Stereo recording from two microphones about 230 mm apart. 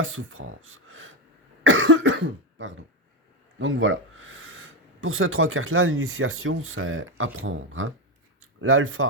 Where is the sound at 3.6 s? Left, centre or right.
Right.